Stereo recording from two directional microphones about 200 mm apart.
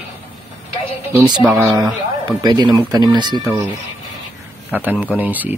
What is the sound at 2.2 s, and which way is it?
Speech, 20° right (ahead or behind).